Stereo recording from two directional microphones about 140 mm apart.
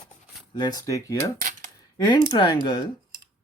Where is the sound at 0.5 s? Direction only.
30° left (ahead or behind).